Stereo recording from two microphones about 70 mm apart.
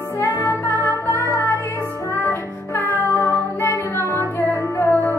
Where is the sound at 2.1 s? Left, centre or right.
Left.